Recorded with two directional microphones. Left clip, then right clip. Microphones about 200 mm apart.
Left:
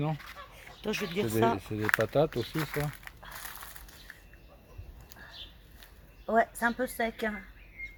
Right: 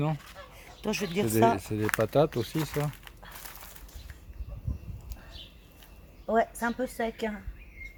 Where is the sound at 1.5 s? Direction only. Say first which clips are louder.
Even; 15° right (ahead or behind).